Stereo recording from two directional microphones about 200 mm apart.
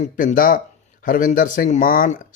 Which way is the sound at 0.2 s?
40° left (ahead or behind).